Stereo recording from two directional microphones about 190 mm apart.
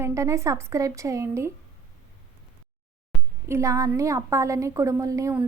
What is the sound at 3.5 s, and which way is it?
A woman's voice, 15° right (ahead or behind).